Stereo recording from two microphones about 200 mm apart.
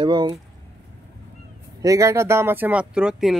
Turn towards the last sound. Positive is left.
turn(degrees=-5)  # may be behind; listen again after turning